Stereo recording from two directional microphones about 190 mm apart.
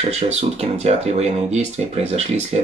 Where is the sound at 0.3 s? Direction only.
35° right (ahead or behind).